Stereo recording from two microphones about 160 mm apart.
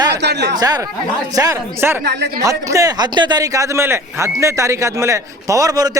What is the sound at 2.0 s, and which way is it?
Speech, 90° right.